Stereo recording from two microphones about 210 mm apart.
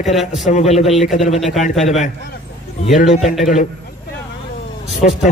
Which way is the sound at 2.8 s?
35° left (ahead or behind).